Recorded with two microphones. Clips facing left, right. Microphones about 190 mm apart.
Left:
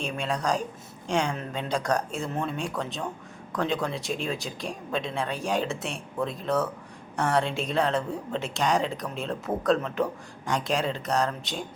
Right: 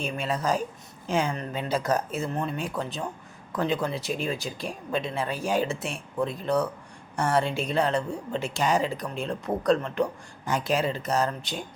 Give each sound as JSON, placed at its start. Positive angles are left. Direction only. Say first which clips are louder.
{"t": 0.0, "sound": "speech", "louder": "right 1 dB", "side_deg": 0}